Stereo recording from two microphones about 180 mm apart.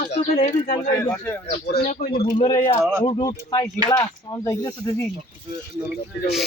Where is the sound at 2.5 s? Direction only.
20° left (ahead or behind).